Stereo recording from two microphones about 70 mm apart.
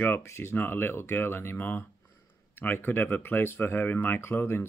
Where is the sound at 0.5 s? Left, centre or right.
Left.